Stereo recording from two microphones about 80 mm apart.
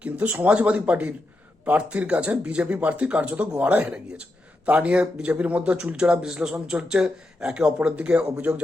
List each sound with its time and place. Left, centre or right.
0.0 s speech: right